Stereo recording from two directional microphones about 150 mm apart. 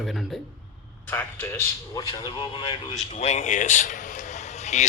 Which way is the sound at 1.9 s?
30° left (ahead or behind).